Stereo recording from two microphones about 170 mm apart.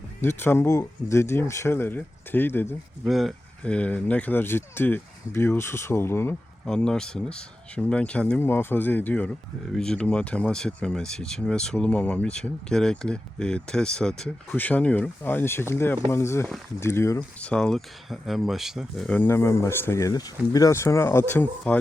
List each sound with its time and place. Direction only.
0.2 s speech: 15° left (ahead or behind)
3.0 s speech: centre (ahead or behind); by 17.2 s 15° left (ahead or behind)
17.4 s speech: 5° left (ahead or behind)